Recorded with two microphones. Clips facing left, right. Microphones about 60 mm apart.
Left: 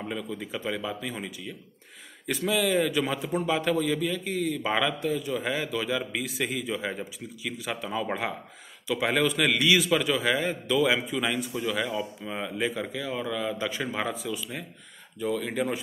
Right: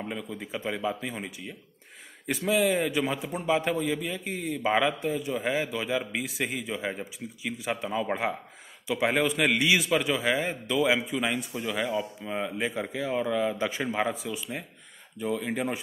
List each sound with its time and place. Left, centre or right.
0.1 s a man's voice: centre